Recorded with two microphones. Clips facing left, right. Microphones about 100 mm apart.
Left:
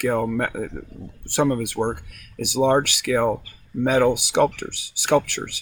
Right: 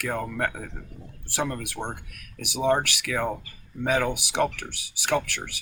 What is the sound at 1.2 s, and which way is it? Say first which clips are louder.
Speech: left 9 dB; 25° left (ahead or behind).